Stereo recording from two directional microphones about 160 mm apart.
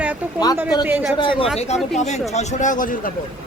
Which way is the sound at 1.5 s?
45° left (ahead or behind).